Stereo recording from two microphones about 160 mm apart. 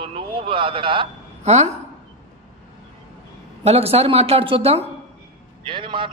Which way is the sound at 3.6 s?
40° right (ahead or behind).